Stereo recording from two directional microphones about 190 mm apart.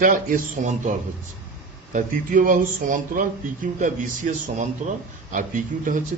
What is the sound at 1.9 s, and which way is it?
A man's voice, 45° right (ahead or behind).